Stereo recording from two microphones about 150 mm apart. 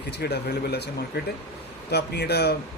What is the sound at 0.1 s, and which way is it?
Speech, 90° left.